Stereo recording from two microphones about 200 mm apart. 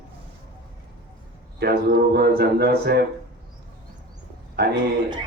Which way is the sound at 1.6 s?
50° right (ahead or behind).